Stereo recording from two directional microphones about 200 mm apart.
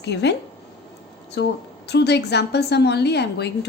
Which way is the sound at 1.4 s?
60° left (ahead or behind).